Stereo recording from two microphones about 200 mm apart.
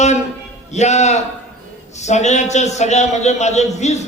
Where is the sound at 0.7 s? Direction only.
35° left (ahead or behind).